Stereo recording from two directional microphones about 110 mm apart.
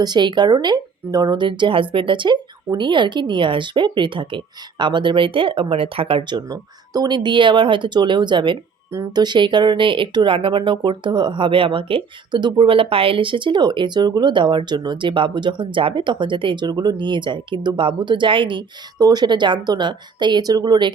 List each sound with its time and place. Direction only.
0.0 s speech: 40° right (ahead or behind)
18.9 s speech: 35° right (ahead or behind)